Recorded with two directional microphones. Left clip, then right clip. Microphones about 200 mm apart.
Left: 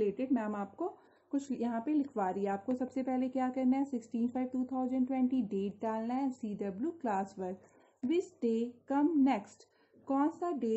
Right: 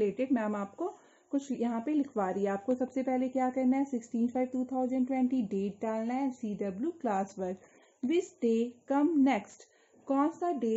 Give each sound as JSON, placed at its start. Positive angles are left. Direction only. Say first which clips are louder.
{"t": 0.0, "sound": "speech", "louder": "right 3 dB", "side_deg": -30}